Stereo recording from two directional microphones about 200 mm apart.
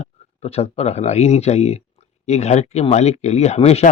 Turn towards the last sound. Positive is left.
turn(degrees=35)  # may be behind; listen again after turning